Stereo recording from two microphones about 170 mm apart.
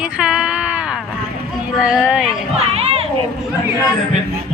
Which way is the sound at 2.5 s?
35° right (ahead or behind).